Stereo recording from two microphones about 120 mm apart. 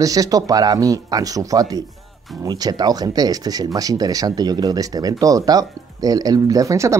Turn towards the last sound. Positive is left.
turn(degrees=-25)  # may be behind; listen again after turning